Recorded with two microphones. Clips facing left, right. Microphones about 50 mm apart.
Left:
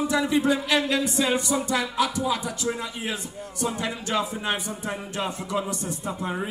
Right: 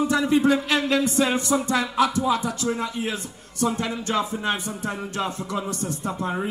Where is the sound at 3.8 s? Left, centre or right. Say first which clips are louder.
Right 2 dB; left.